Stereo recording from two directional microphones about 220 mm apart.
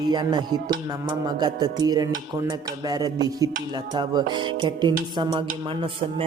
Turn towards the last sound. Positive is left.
turn(degrees=-25)  # may be behind; listen again after turning